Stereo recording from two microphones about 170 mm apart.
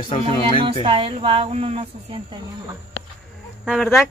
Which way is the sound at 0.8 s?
30° right (ahead or behind).